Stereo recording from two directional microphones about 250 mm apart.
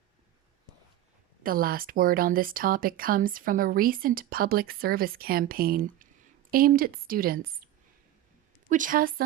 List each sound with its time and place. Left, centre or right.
1.5 s speech: right
8.7 s speech: right